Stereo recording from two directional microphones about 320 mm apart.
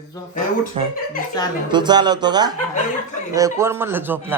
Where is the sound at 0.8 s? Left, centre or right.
Centre.